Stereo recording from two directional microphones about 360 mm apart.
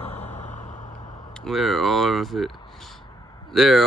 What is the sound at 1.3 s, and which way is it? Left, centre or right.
Speech, centre.